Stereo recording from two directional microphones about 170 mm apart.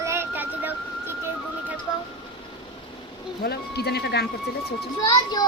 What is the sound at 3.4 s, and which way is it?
Speech, 70° left (ahead or behind).